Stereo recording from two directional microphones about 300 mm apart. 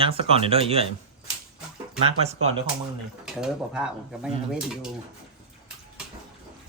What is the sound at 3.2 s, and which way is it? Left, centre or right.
Speech, centre.